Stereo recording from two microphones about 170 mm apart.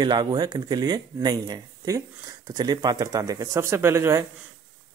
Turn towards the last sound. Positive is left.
turn(degrees=-15)  # may be behind; listen again after turning